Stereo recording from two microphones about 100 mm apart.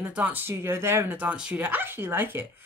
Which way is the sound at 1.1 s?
10° right (ahead or behind).